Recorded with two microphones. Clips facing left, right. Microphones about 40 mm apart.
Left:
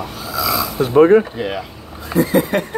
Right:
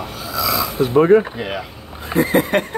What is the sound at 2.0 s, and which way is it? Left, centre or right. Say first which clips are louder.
Speech: left 1 dB; right.